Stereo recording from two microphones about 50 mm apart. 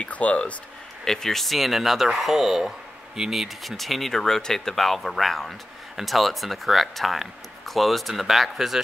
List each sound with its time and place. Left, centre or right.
0.0 s speech: left
1.0 s speech: centre